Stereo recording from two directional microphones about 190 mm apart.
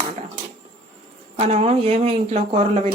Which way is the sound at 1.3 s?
35° right (ahead or behind).